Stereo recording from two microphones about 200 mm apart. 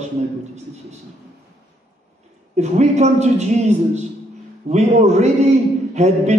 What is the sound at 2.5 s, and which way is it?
A man's voice, 35° right (ahead or behind).